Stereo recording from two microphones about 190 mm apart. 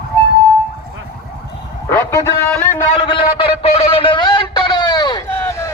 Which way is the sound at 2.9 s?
25° left (ahead or behind).